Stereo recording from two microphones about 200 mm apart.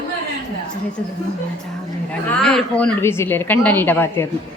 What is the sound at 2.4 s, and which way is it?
A woman's voice, 5° left (ahead or behind).